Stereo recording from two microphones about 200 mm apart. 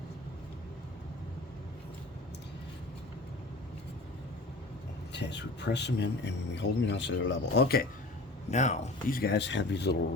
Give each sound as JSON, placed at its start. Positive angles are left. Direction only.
{"t": 5.1, "sound": "speech", "side_deg": 60}
{"t": 8.4, "sound": "speech", "side_deg": 35}